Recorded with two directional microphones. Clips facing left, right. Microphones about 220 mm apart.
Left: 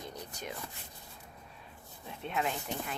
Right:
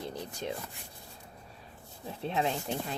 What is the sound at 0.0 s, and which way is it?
Rub, 30° right (ahead or behind).